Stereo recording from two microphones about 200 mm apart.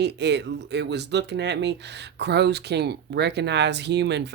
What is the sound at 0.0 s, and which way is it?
Speech, 60° right (ahead or behind).